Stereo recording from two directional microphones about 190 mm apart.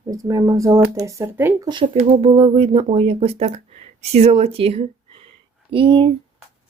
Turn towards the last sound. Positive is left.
turn(degrees=-25)  # may be behind; listen again after turning